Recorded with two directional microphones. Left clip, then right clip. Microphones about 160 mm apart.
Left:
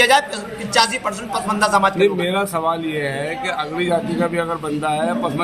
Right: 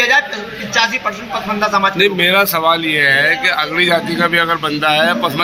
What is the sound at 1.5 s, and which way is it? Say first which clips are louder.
Speech: right 1 dB; 40° left (ahead or behind).